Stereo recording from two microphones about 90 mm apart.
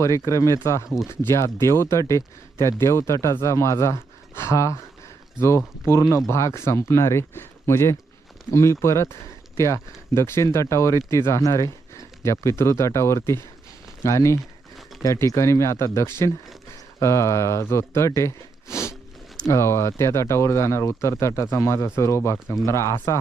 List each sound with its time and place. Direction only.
0.4 s speech: 35° left (ahead or behind)